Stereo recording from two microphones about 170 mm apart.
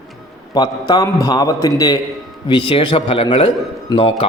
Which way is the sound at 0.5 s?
25° left (ahead or behind).